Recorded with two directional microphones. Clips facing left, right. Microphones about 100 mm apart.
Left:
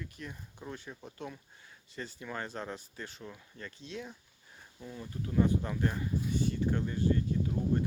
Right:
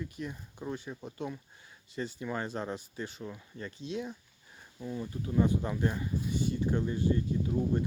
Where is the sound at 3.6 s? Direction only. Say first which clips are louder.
Right 6 dB; 15° right (ahead or behind).